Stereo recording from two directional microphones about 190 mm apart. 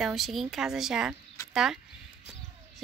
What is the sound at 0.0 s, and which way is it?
Speech, centre (ahead or behind).